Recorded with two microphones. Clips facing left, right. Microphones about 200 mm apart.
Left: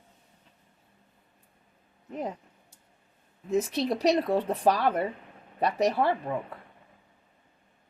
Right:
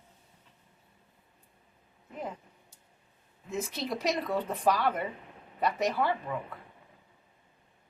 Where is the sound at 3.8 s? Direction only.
35° left (ahead or behind).